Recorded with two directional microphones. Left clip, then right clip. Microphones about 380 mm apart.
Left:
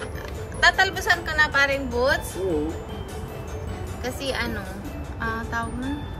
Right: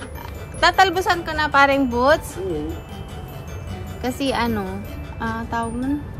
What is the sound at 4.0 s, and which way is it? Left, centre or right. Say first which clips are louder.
Speech: right 6 dB; centre.